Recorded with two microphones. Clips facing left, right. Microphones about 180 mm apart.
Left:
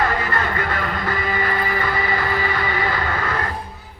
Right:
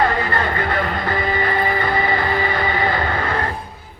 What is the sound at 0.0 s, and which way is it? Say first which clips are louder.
Music: right 3 dB; 30° right (ahead or behind).